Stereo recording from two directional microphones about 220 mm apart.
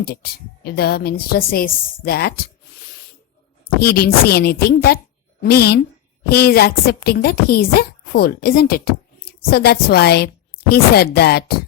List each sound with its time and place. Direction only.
0.6 s a woman's voice: 45° left (ahead or behind)
3.8 s a woman's voice: 45° left (ahead or behind)